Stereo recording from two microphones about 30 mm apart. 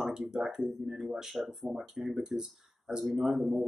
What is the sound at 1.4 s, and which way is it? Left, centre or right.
Speech, centre.